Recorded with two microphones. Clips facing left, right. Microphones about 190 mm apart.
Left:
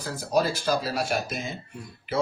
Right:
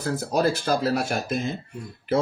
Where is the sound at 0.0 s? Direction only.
55° right (ahead or behind).